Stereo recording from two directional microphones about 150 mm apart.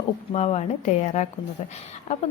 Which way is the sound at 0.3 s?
45° left (ahead or behind).